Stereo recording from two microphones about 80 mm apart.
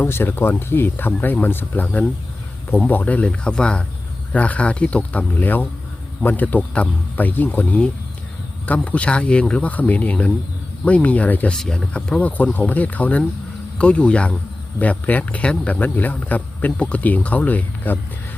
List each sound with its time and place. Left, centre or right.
0.0 s speech: left
11.5 s speech: centre